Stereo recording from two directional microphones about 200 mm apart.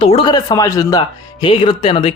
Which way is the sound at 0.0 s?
25° left (ahead or behind).